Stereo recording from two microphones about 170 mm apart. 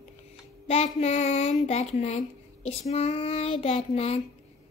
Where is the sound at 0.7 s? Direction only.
40° left (ahead or behind).